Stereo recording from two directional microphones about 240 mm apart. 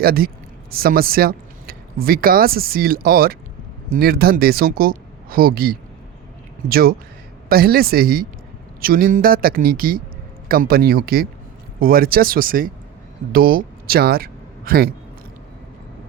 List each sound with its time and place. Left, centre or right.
0.0 s speech: right